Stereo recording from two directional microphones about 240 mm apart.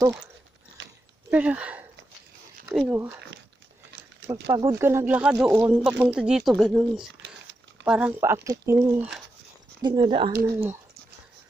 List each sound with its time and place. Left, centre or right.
0.8 s a sound: right
1.3 s speech: centre
4.3 s speech: centre
10.4 s speech: centre